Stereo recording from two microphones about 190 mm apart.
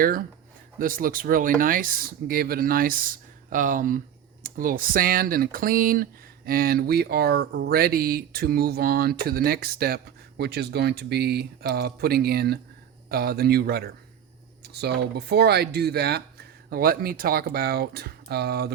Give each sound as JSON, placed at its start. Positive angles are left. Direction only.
{"t": 0.0, "sound": "speech", "side_deg": -50}